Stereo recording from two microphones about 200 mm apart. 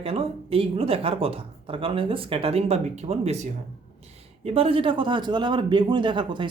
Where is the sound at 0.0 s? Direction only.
30° right (ahead or behind).